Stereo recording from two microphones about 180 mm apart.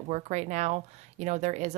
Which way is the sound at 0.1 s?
40° right (ahead or behind).